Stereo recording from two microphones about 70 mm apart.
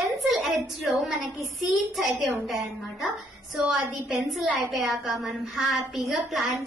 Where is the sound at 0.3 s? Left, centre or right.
Centre.